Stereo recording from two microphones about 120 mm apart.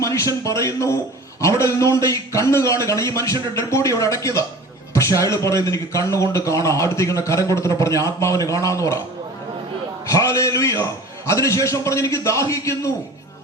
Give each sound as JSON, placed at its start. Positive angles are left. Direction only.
{"t": 0.0, "sound": "a man's voice", "side_deg": 25}
{"t": 10.1, "sound": "a man's voice", "side_deg": 25}